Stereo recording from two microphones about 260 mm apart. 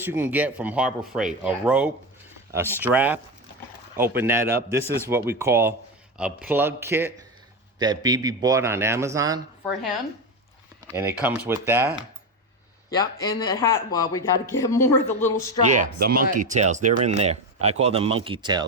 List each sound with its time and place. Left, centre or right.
0.0 s a man's voice: centre
10.9 s a man's voice: centre
12.9 s speech: centre
15.6 s speech: right